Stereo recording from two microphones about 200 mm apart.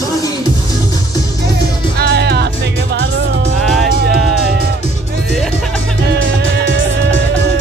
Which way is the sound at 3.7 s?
Centre (ahead or behind).